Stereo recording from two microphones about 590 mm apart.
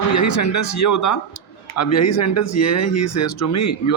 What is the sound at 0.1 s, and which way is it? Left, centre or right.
Speech, left.